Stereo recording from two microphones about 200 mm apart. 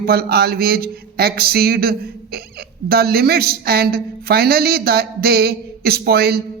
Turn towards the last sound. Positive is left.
turn(degrees=-50)  # may be behind; listen again after turning